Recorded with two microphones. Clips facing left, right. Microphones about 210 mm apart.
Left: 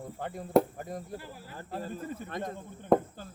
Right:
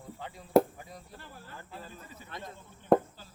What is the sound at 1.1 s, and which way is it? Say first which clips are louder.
Speech: left 7 dB; 10° left (ahead or behind).